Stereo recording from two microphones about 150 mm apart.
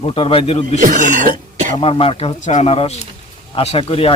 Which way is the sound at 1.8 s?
40° left (ahead or behind).